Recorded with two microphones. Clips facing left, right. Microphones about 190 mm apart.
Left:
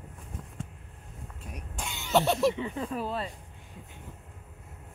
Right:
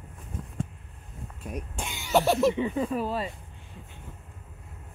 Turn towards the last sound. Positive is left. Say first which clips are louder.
# right 4 dB
turn(degrees=-5)  # may be behind; listen again after turning